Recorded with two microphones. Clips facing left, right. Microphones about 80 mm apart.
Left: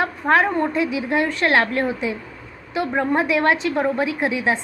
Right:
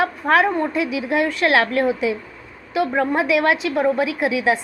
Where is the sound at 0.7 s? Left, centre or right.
Left.